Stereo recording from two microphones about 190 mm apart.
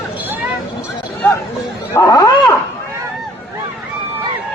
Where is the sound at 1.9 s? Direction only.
15° left (ahead or behind).